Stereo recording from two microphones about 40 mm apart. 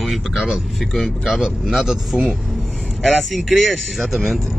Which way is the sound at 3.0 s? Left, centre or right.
Centre.